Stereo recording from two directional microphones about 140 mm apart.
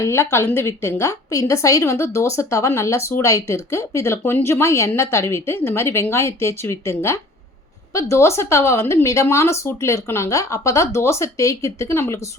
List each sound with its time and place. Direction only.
0.0 s a woman's voice: 20° left (ahead or behind)